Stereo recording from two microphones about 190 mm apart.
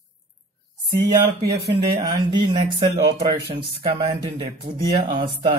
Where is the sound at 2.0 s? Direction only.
25° right (ahead or behind).